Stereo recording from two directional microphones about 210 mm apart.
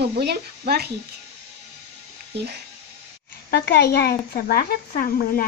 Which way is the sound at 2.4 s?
50° right (ahead or behind).